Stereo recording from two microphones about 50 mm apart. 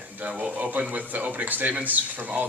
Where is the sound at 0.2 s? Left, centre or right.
Right.